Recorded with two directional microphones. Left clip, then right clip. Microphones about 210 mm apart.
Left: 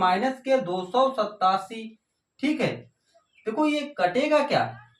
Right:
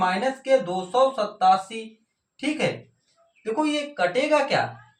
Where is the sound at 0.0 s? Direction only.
10° left (ahead or behind).